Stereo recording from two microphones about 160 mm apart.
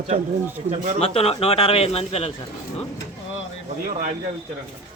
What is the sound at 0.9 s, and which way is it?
Speech, 40° left (ahead or behind).